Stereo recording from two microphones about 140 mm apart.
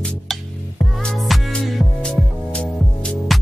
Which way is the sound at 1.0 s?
5° left (ahead or behind).